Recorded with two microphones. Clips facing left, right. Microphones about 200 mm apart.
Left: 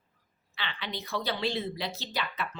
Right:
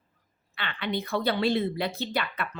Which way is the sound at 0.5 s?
55° right (ahead or behind).